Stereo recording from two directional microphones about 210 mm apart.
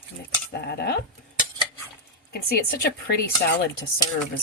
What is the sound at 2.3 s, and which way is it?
A woman's voice, 50° left (ahead or behind).